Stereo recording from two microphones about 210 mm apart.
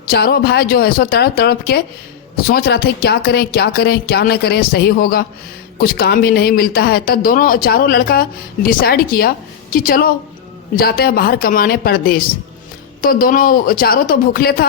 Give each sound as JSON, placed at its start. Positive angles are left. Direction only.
{"t": 0.1, "sound": "speech", "side_deg": 50}